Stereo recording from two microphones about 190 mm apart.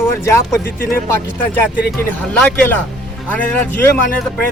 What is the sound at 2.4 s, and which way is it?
Speech, 5° left (ahead or behind).